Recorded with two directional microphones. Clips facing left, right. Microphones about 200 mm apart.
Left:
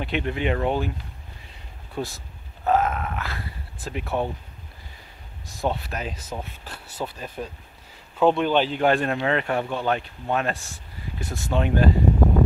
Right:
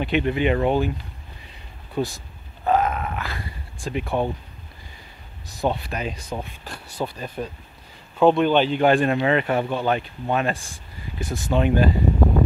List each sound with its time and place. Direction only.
0.0 s speech: 5° right (ahead or behind)
2.0 s speech: centre (ahead or behind)
5.5 s speech: centre (ahead or behind)